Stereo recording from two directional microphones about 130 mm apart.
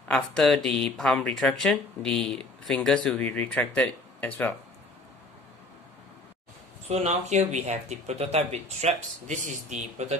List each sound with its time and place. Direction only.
0.1 s speech: centre (ahead or behind)
6.9 s speech: 55° right (ahead or behind)